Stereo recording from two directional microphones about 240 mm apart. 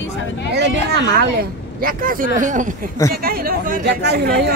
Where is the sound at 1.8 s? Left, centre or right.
Right.